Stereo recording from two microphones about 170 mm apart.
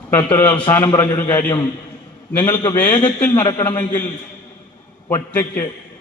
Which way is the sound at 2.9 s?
30° left (ahead or behind).